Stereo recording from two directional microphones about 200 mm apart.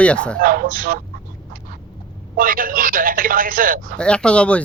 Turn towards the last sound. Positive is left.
turn(degrees=5)  # may be behind; listen again after turning